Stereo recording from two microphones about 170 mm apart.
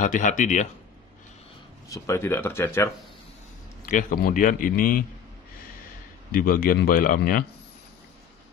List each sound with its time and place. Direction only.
0.0 s a man's voice: 50° left (ahead or behind)
1.9 s speech: 15° left (ahead or behind)
3.8 s a man's voice: 55° left (ahead or behind)
6.3 s speech: 60° left (ahead or behind)